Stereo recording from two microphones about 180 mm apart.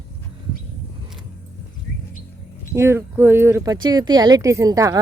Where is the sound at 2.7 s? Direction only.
15° right (ahead or behind).